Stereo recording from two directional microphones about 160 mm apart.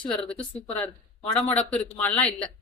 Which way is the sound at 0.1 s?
5° left (ahead or behind).